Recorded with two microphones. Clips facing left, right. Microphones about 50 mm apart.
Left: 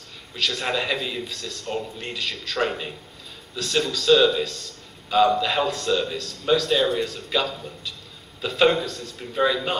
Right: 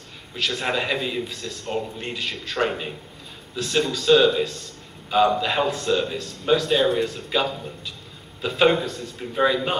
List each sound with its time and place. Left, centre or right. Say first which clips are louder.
0.4 s a man's voice: right 1 dB; centre
1.7 s a man's voice: right 2 dB; centre
2.1 s a man's voice: left 1 dB; centre
2.6 s a man's voice: right 1 dB; centre